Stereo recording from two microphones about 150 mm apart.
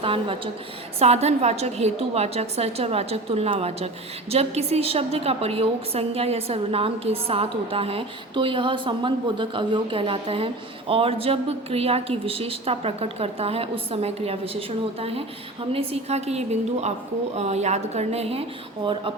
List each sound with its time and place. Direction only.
0.0 s a woman's voice: 35° right (ahead or behind)
15.7 s a woman's voice: 40° right (ahead or behind)